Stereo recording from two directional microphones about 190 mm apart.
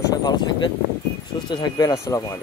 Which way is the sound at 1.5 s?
20° left (ahead or behind).